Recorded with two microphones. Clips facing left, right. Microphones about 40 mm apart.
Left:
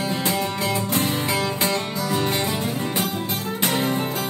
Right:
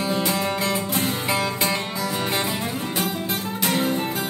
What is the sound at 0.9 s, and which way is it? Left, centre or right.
Music, left.